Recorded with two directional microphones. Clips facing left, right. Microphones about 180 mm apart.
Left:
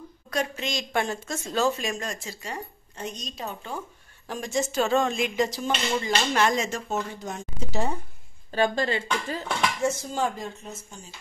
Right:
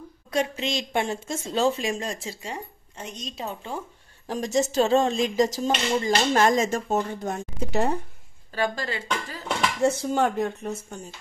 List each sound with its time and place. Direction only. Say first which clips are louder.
0.3 s speech: right 3 dB; 25° right (ahead or behind)
4.3 s speech: right 4 dB; 40° right (ahead or behind); by 8.0 s 60° right (ahead or behind)
8.5 s speech: left 3 dB; 25° left (ahead or behind)
9.8 s speech: right 7 dB; 60° right (ahead or behind)